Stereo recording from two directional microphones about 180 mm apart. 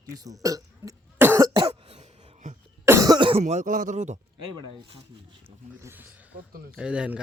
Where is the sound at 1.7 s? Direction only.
35° right (ahead or behind).